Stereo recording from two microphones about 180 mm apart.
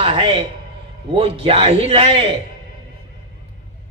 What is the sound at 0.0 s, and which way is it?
A man's voice, 30° right (ahead or behind).